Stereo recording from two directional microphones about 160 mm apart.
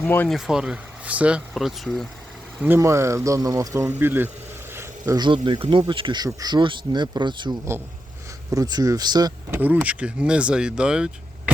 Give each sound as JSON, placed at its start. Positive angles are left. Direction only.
{"t": 0.0, "sound": "speech", "side_deg": 10}
{"t": 0.3, "sound": "speech", "side_deg": -5}
{"t": 2.6, "sound": "speech", "side_deg": -15}
{"t": 9.5, "sound": "speech", "side_deg": -10}